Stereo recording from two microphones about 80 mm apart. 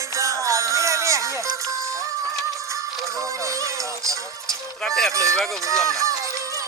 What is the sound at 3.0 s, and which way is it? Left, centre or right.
Music, right.